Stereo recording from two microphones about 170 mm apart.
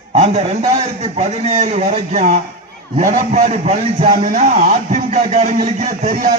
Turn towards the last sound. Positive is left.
turn(degrees=-45)  # may be behind; listen again after turning